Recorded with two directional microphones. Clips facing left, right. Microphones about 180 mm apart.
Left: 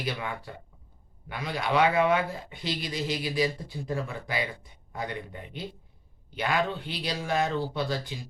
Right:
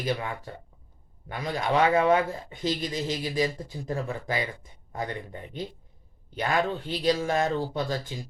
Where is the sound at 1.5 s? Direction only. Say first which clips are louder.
Right 1 dB; 40° right (ahead or behind).